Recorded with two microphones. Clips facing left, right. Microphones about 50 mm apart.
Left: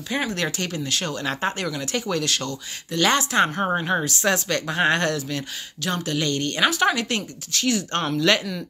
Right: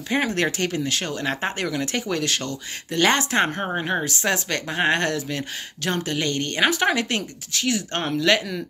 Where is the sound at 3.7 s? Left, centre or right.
Centre.